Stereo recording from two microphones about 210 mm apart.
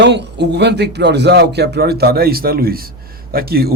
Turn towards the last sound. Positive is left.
turn(degrees=-45)  # may be behind; listen again after turning